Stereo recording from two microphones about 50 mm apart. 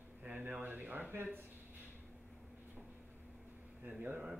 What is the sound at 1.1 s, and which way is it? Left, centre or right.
Speech, right.